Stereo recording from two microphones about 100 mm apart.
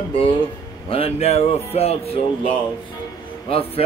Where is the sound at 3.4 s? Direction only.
70° left (ahead or behind).